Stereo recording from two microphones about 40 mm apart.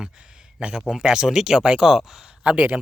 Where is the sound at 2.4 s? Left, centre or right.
Right.